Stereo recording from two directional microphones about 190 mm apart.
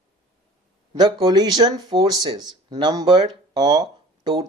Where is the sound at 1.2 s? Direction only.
20° right (ahead or behind).